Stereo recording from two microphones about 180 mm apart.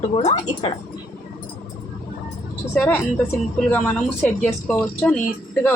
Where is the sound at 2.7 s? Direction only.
10° left (ahead or behind).